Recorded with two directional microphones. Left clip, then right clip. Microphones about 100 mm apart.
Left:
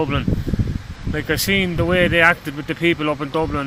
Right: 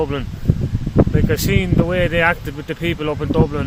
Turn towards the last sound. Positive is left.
turn(degrees=-30)  # may be behind; listen again after turning